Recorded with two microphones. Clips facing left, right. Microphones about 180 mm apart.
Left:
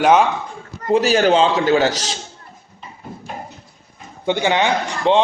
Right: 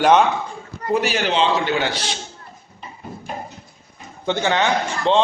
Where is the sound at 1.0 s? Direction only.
45° left (ahead or behind).